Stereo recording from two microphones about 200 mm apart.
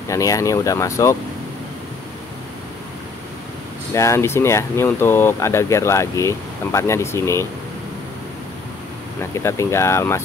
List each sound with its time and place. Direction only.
0.1 s speech: 15° left (ahead or behind)
3.9 s speech: 15° left (ahead or behind)
9.2 s speech: 15° left (ahead or behind)